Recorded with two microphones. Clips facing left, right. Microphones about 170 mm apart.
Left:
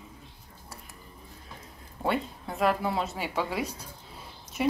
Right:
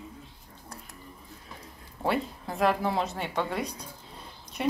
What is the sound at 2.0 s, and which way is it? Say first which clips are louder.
Speech: right 1 dB; centre (ahead or behind).